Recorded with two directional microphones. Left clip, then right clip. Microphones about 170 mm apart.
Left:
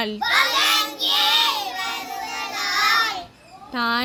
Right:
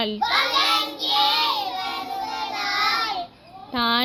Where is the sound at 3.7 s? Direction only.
15° left (ahead or behind).